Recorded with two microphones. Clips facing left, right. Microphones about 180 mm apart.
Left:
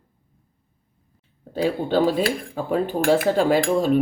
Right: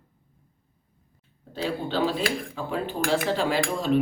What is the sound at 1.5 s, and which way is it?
Speech, 50° left (ahead or behind).